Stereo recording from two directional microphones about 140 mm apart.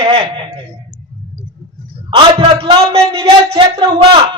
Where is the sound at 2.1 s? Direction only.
40° right (ahead or behind).